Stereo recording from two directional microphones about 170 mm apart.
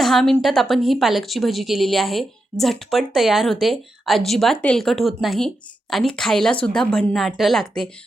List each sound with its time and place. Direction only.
0.0 s speech: centre (ahead or behind)